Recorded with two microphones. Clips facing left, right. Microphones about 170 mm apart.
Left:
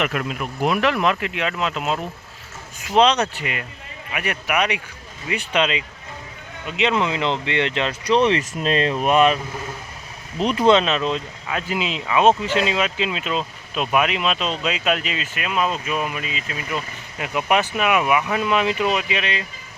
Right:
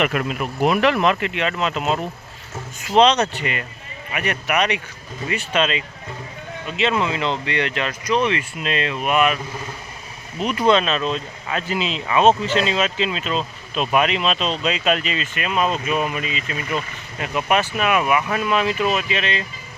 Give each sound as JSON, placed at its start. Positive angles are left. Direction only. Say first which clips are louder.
{"t": 0.0, "sound": "speech", "louder": "right 3 dB", "side_deg": 0}
{"t": 10.4, "sound": "speech", "louder": "left 1 dB", "side_deg": 25}
{"t": 17.2, "sound": "speech", "louder": "even", "side_deg": 15}